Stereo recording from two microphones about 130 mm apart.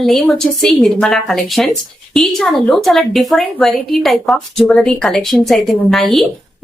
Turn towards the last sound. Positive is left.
turn(degrees=0)  # may be behind; listen again after turning